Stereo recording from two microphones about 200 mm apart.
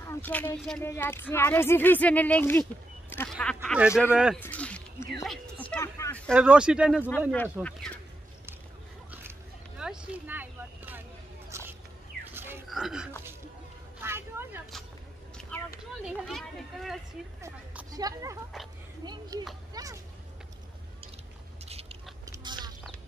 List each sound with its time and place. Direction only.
0.1 s speech: 10° left (ahead or behind)
3.6 s speech: 5° right (ahead or behind)
4.4 s speech: 5° left (ahead or behind)
6.3 s speech: 5° right (ahead or behind)
7.1 s speech: 10° left (ahead or behind)
9.8 s vehicle: 5° right (ahead or behind)
11.5 s a sound: 15° right (ahead or behind)
12.6 s speech: centre (ahead or behind)
14.0 s vehicle: 10° right (ahead or behind)
15.5 s a sound: 5° left (ahead or behind)
17.4 s a sound: 15° right (ahead or behind)
19.3 s speech: 20° right (ahead or behind)
19.7 s a sound: 15° right (ahead or behind)
22.2 s chewing: 20° right (ahead or behind)